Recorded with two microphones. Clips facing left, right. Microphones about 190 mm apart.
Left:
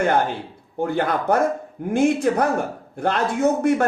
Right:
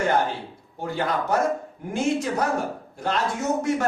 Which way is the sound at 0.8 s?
55° left (ahead or behind).